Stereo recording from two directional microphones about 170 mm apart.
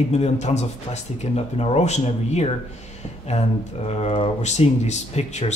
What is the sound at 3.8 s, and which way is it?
Speech, 35° left (ahead or behind).